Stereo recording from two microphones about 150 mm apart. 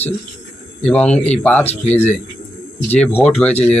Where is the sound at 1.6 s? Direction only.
45° left (ahead or behind).